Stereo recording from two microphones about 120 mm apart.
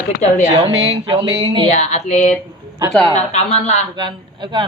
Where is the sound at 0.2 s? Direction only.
80° left.